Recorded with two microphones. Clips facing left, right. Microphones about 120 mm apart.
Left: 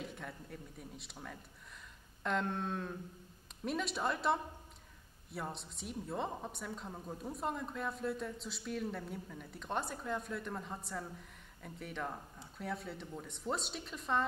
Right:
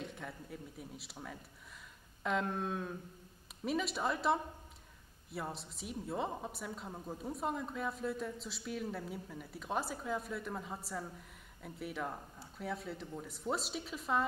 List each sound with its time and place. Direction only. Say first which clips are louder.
0.0 s a woman's voice: right 1 dB; centre (ahead or behind)